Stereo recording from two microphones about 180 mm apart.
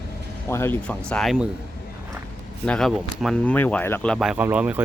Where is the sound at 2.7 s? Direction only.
Centre (ahead or behind).